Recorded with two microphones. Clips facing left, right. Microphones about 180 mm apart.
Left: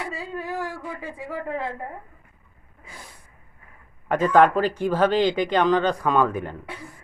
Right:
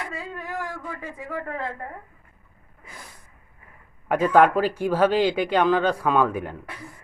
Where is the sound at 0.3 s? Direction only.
30° left (ahead or behind).